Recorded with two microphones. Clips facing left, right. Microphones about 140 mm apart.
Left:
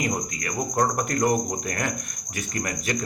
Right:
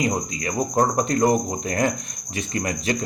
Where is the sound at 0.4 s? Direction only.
25° right (ahead or behind).